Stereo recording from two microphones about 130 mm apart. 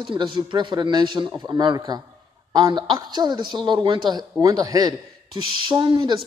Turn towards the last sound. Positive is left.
turn(degrees=-35)  # may be behind; listen again after turning